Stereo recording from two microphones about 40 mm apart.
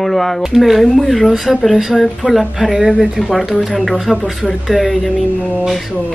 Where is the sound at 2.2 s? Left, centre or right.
Right.